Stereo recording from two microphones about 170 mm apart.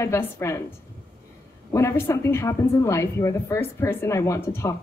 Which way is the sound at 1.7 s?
15° left (ahead or behind).